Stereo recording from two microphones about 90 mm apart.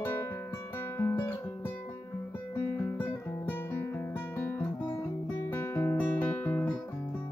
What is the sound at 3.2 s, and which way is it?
Guitar, 20° left (ahead or behind).